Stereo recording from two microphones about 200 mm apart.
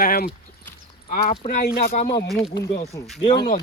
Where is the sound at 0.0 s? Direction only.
45° left (ahead or behind).